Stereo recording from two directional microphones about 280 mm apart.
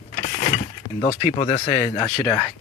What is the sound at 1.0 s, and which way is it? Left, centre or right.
Speech, left.